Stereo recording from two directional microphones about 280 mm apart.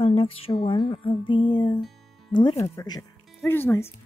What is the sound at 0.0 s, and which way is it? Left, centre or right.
Music, centre.